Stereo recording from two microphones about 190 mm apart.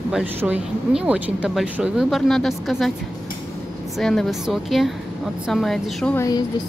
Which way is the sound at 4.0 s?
5° left (ahead or behind).